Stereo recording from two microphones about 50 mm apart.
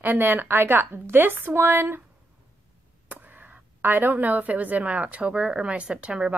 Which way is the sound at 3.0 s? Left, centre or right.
Right.